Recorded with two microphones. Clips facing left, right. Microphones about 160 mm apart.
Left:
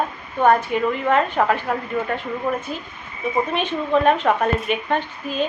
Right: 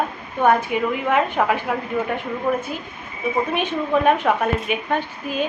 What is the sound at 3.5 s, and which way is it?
A woman's voice, 10° right (ahead or behind).